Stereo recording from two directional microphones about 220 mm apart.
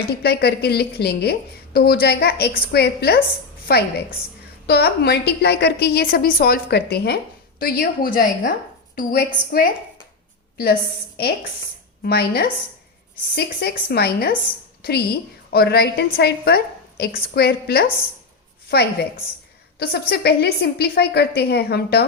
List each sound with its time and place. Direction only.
0.1 s a woman's voice: 45° left (ahead or behind)
12.0 s a woman's voice: 45° left (ahead or behind)